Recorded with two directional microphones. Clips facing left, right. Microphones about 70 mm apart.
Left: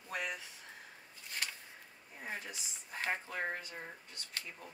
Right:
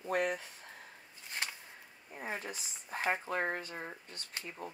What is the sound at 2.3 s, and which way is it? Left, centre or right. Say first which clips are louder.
Speech: right 3 dB; right.